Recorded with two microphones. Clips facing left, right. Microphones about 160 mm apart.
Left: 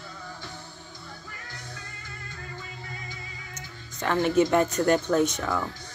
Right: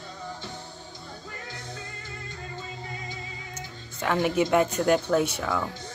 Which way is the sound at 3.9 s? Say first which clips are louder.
Left 2 dB; 10° right (ahead or behind).